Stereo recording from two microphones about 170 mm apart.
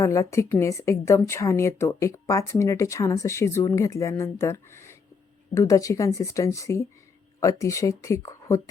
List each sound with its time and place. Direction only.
0.0 s a woman's voice: 20° left (ahead or behind)